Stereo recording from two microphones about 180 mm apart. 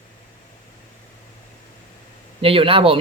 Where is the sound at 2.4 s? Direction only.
30° right (ahead or behind).